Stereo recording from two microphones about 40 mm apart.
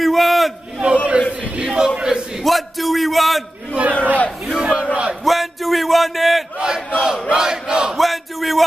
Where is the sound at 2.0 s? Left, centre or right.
Centre.